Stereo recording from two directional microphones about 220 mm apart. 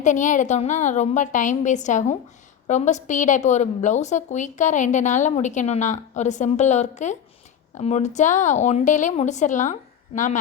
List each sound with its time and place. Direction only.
0.0 s a woman's voice: 35° left (ahead or behind)